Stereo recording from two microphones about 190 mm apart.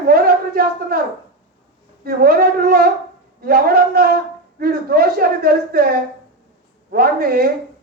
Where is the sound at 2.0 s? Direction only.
50° right (ahead or behind).